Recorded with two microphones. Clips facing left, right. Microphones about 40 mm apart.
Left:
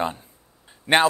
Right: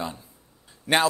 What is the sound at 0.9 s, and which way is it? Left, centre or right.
Speech, left.